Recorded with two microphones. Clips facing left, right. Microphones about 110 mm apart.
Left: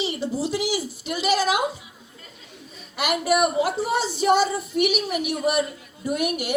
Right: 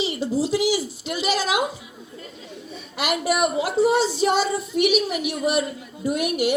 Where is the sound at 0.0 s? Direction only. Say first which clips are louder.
Right 1 dB; 50° left (ahead or behind).